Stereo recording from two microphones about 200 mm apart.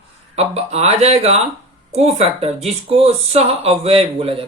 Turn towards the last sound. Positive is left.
turn(degrees=-30)  # may be behind; listen again after turning